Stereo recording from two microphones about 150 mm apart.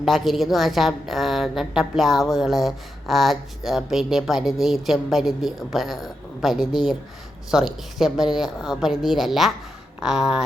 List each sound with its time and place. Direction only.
0.0 s a woman's voice: centre (ahead or behind)